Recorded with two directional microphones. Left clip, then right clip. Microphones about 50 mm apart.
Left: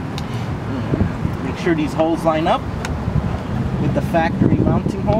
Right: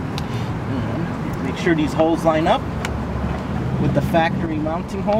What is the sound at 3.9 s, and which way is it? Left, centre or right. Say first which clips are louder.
Speech: even; centre.